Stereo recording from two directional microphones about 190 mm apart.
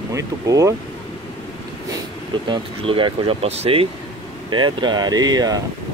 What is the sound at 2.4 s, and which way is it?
Speech, 25° right (ahead or behind).